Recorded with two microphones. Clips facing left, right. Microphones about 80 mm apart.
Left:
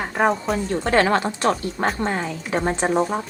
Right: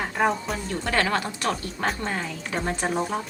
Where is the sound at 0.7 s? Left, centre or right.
Left.